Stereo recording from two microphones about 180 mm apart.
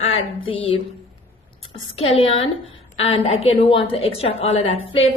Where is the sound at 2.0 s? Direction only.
30° left (ahead or behind).